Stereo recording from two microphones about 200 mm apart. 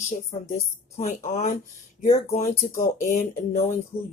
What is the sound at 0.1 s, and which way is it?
Speech, 35° left (ahead or behind).